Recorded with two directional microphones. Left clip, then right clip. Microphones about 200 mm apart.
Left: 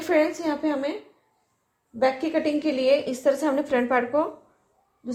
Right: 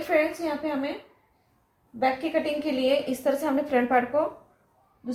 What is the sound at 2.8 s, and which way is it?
A woman's voice, 40° left (ahead or behind).